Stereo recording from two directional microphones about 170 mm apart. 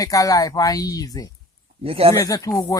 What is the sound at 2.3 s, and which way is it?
Speech, 20° left (ahead or behind).